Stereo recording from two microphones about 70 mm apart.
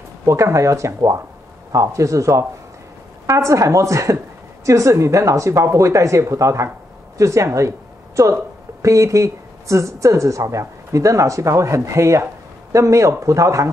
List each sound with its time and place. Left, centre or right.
0.2 s speech: right
8.8 s speech: right